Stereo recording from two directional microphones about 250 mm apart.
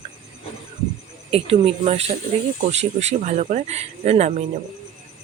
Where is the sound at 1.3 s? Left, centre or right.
Right.